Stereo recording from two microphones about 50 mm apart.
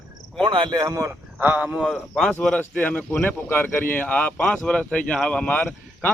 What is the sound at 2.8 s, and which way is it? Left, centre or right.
Speech, left.